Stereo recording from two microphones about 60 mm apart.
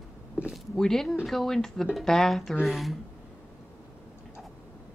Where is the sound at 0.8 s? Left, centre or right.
Centre.